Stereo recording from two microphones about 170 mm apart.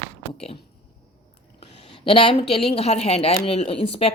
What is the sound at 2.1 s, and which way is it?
A woman's voice, 30° left (ahead or behind).